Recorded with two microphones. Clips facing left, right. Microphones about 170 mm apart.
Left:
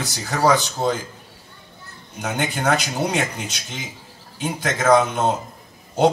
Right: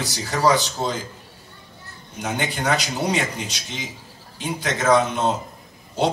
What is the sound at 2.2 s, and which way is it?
Speech, 50° left (ahead or behind).